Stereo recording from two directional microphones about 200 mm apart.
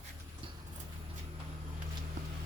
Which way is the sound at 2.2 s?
40° right (ahead or behind).